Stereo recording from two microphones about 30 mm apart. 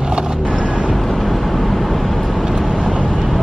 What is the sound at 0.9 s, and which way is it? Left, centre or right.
Vehicle, centre.